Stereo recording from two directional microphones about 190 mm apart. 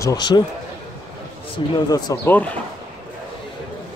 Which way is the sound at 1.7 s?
20° left (ahead or behind).